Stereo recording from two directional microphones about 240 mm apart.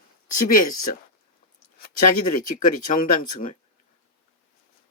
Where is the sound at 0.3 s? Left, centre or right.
Left.